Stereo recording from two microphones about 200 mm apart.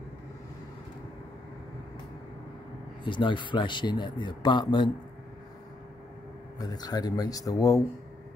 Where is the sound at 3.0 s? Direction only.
25° left (ahead or behind).